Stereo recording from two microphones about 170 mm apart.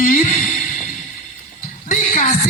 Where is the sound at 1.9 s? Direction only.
50° left (ahead or behind).